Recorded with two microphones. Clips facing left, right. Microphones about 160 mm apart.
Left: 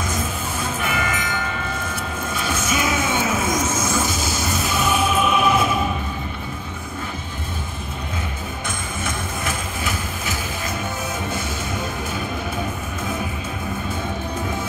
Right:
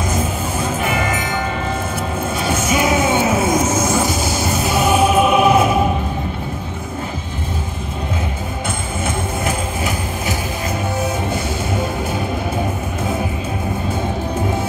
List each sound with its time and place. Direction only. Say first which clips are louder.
0.7 s music: right 3 dB; 40° right (ahead or behind)
2.4 s a sound: right 5 dB; 35° right (ahead or behind)
4.7 s music: right 7 dB; 40° right (ahead or behind)